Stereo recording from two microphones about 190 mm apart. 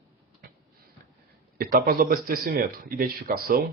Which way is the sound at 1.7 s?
50° right (ahead or behind).